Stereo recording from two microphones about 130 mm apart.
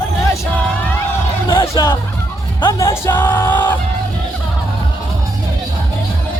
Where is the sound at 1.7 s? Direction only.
20° left (ahead or behind).